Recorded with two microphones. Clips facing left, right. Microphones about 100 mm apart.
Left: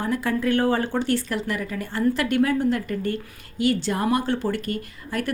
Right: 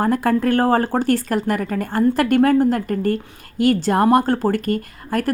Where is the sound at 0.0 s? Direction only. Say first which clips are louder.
Right 6 dB; 50° right (ahead or behind).